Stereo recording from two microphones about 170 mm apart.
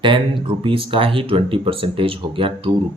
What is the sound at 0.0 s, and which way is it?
Speech, 30° right (ahead or behind).